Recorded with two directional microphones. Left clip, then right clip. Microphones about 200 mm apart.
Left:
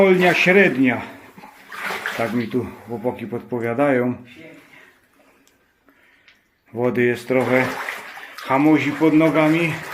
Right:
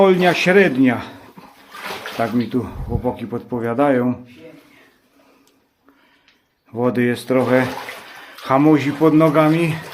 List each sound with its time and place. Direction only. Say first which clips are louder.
0.0 s speech: right 1 dB; 15° right (ahead or behind)
6.7 s speech: even; 10° right (ahead or behind)
8.4 s speech: right 2 dB; 25° right (ahead or behind)